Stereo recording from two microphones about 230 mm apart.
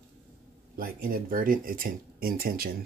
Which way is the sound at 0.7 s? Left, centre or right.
Right.